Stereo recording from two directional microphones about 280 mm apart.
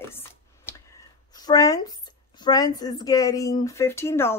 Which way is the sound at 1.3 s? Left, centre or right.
Centre.